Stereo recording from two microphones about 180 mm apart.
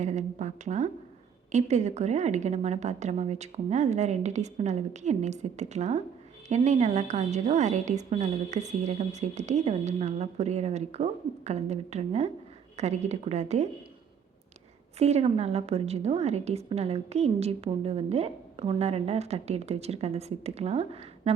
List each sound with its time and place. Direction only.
0.0 s a woman's voice: 40° right (ahead or behind)
14.9 s a woman's voice: 35° right (ahead or behind)